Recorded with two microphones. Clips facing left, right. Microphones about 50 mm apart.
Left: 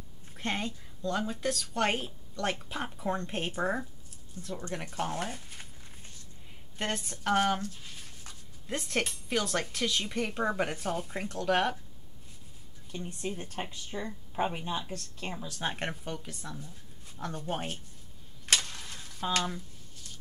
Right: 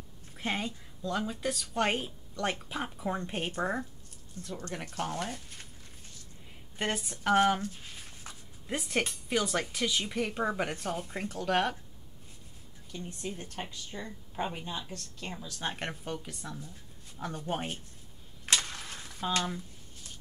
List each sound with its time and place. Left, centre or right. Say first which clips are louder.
0.3 s speech: even; centre
6.8 s speech: right 1 dB; centre
7.6 s a sound: right 1 dB; right
8.6 s speech: even; centre
12.9 s a woman's voice: left 2 dB; centre
15.6 s speech: left 1 dB; centre
18.4 s a sound: left 1 dB; right